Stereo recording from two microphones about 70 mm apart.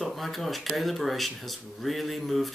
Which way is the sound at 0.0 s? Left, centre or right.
Centre.